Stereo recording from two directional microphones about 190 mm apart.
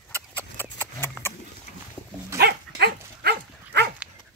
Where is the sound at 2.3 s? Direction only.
60° right (ahead or behind).